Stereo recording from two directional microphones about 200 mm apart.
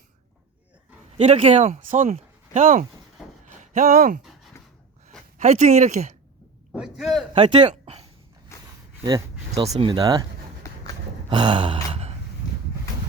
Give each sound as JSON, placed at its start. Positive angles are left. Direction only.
{"t": 1.2, "sound": "speech", "side_deg": -35}
{"t": 5.4, "sound": "speech", "side_deg": -35}
{"t": 6.7, "sound": "a man's voice", "side_deg": 0}
{"t": 7.3, "sound": "speech", "side_deg": -25}
{"t": 7.7, "sound": "a sound", "side_deg": -30}
{"t": 8.5, "sound": "a sound", "side_deg": 15}
{"t": 9.5, "sound": "speech", "side_deg": -35}
{"t": 9.7, "sound": "speech", "side_deg": -20}
{"t": 10.6, "sound": "run", "side_deg": 15}
{"t": 11.3, "sound": "gasp", "side_deg": -25}